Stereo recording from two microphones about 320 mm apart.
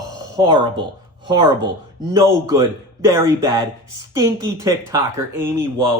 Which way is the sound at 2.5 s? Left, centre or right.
Centre.